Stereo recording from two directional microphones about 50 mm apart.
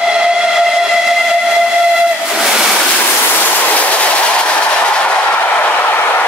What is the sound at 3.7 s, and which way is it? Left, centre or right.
Train, left.